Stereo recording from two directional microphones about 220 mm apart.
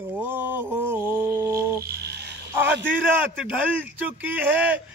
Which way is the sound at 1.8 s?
45° right (ahead or behind).